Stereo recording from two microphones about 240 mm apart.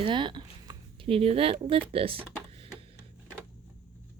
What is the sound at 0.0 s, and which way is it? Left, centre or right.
Speech, right.